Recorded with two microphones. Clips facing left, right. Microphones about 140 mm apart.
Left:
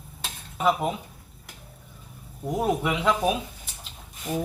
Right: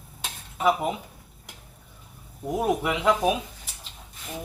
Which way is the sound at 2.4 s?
10° right (ahead or behind).